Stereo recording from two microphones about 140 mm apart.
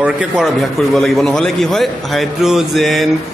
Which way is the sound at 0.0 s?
5° right (ahead or behind).